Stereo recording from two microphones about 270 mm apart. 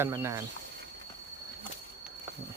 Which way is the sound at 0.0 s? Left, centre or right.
Centre.